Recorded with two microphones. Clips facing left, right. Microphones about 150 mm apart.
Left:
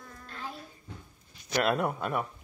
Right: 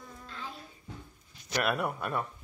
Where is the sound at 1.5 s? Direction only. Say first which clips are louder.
Left 3 dB; 20° left (ahead or behind).